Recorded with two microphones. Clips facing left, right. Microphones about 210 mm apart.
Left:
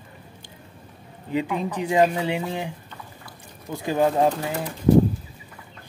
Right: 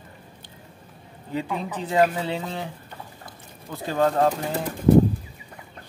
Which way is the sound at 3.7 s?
15° left (ahead or behind).